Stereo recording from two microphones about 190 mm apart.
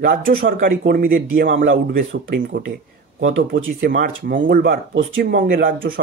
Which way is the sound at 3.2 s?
90° right.